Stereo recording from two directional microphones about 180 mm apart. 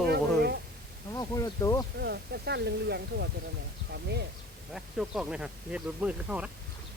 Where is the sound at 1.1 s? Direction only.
20° left (ahead or behind).